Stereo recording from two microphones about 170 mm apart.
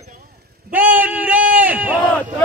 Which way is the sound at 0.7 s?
10° right (ahead or behind).